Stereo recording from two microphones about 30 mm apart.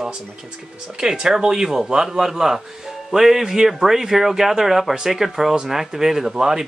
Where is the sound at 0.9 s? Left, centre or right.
Right.